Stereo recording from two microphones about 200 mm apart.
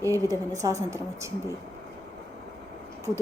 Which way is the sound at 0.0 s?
15° right (ahead or behind).